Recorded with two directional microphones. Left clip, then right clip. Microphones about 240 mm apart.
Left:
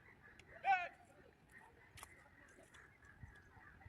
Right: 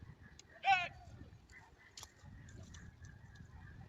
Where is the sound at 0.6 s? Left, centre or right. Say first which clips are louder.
Right 4 dB; left.